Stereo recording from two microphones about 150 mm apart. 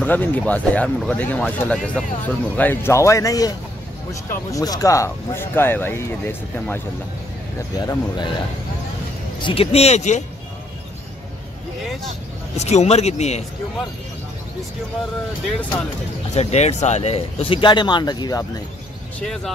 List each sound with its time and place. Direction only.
0.0 s speech: 10° left (ahead or behind)
7.8 s a man's voice: 25° left (ahead or behind)
9.4 s speech: 40° left (ahead or behind)
12.5 s speech: 45° left (ahead or behind)
16.3 s speech: 50° left (ahead or behind); by 18.4 s 25° left (ahead or behind)
19.1 s speech: 5° left (ahead or behind)